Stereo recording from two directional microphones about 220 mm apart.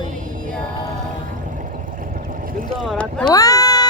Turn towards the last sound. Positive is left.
turn(degrees=15)  # may be behind; listen again after turning